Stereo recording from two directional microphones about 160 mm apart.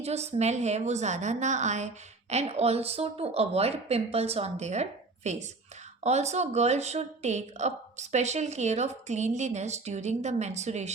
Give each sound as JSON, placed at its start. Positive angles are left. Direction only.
{"t": 0.0, "sound": "speech", "side_deg": -40}